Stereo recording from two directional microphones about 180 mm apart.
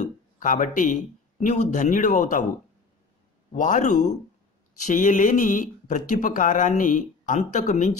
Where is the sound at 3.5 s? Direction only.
45° left (ahead or behind).